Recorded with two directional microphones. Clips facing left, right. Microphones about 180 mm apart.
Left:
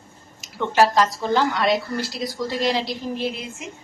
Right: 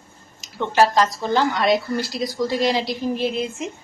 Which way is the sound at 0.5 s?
5° left (ahead or behind).